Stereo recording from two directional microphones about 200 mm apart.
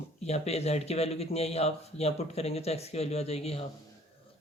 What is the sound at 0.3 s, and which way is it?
Speech, 30° left (ahead or behind).